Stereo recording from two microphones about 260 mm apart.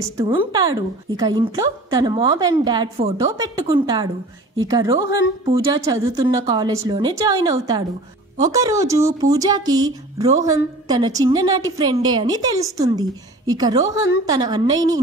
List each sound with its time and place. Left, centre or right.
0.2 s a woman's voice: centre